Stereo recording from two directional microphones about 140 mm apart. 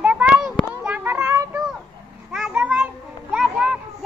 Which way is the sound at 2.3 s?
Centre (ahead or behind).